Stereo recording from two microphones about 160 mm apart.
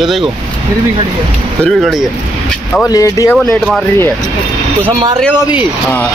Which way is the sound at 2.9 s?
20° left (ahead or behind).